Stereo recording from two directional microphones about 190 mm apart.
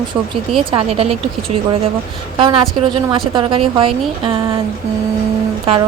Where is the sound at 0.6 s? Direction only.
30° right (ahead or behind).